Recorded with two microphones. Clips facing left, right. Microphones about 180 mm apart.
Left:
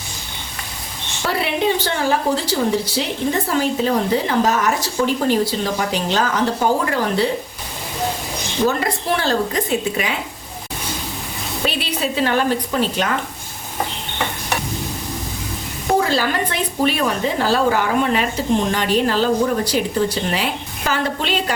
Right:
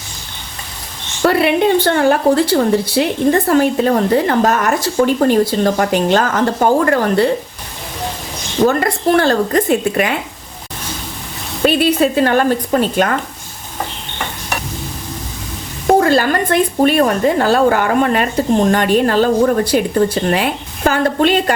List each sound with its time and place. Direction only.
1.2 s a woman's voice: 60° right (ahead or behind)
8.6 s a woman's voice: 55° right (ahead or behind)
11.6 s speech: 50° right (ahead or behind)
15.9 s speech: 55° right (ahead or behind)